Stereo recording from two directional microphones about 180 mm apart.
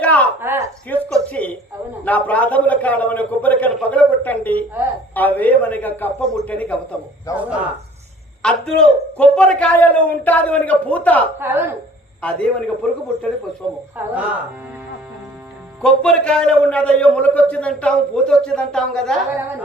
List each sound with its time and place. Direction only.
0.0 s a sound: 10° left (ahead or behind)
0.3 s a sound: 10° right (ahead or behind)
0.9 s a sound: 10° left (ahead or behind)
2.0 s a man's voice: 10° left (ahead or behind)
8.4 s a man's voice: 5° left (ahead or behind)
11.3 s speech: 10° right (ahead or behind)
12.2 s a man's voice: 5° left (ahead or behind)
13.9 s speech: 10° right (ahead or behind)
15.8 s a man's voice: 5° left (ahead or behind)